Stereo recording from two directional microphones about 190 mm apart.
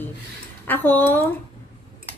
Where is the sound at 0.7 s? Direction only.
10° left (ahead or behind).